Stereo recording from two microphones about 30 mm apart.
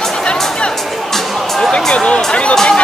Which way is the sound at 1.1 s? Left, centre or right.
Centre.